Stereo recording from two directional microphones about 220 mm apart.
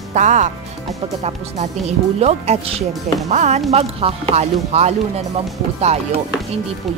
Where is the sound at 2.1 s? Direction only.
30° right (ahead or behind).